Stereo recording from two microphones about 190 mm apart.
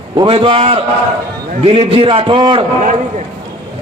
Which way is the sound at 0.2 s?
25° right (ahead or behind).